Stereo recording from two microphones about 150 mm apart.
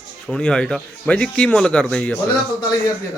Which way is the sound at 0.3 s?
5° left (ahead or behind).